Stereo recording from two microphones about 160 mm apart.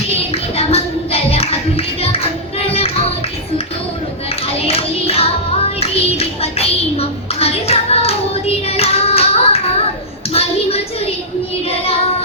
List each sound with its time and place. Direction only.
0.3 s clapping: 40° left (ahead or behind)
4.6 s music: 40° left (ahead or behind)
10.3 s a sound: 40° left (ahead or behind)
11.7 s child singing: 35° left (ahead or behind)